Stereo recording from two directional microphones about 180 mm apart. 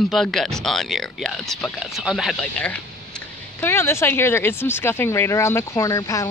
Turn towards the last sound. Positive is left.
turn(degrees=15)  # may be behind; listen again after turning